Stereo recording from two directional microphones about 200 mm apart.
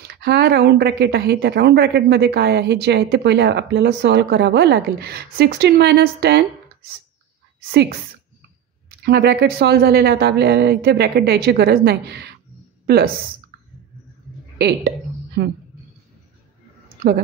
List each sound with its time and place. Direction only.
0.0 s a woman's voice: 55° right (ahead or behind)
7.7 s a woman's voice: 55° right (ahead or behind)
14.6 s a sound: 50° right (ahead or behind)